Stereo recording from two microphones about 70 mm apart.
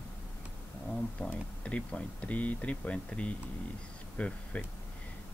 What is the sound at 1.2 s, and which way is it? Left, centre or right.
Speech, centre.